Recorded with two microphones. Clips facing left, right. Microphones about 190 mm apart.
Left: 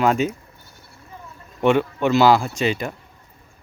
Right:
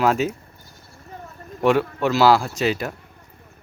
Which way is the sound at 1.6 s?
Centre (ahead or behind).